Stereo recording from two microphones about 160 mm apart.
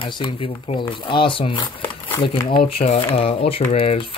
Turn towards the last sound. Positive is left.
turn(degrees=40)  # may be behind; listen again after turning